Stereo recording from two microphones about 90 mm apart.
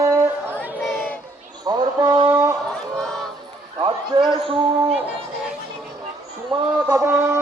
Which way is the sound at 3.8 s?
70° right (ahead or behind).